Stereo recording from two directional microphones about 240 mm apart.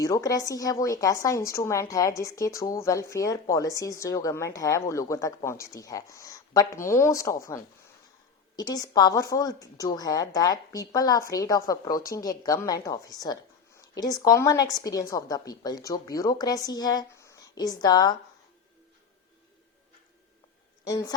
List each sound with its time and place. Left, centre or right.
0.0 s a woman's voice: centre
8.5 s a woman's voice: centre
20.8 s a woman's voice: centre